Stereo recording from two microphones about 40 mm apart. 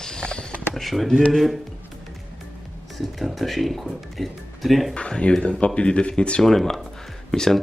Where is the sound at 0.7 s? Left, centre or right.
Centre.